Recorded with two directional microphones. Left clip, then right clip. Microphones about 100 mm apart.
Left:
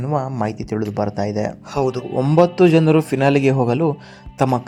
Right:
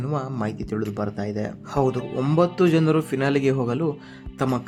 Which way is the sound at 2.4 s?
35° left (ahead or behind).